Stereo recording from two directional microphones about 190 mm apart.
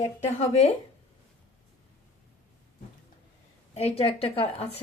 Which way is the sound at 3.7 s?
30° left (ahead or behind).